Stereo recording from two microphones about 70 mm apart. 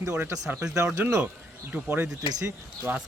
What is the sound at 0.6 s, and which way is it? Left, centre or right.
Speech, right.